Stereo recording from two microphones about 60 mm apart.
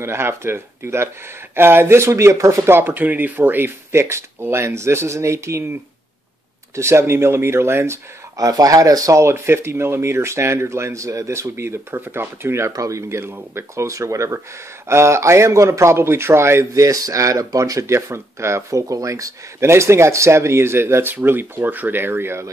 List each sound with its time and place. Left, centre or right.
0.0 s speech: right
2.8 s speech: right
6.7 s speech: right
8.4 s speech: right
9.2 s speech: right
12.7 s speech: right
13.1 s speech: right
16.7 s speech: right
19.7 s speech: right